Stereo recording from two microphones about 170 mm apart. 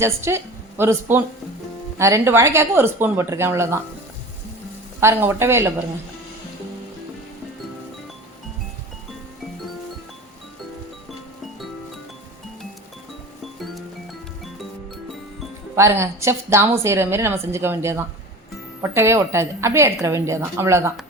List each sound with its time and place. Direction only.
0.0 s a woman's voice: 15° right (ahead or behind)
4.9 s a woman's voice: 15° right (ahead or behind)
15.7 s a woman's voice: 15° right (ahead or behind)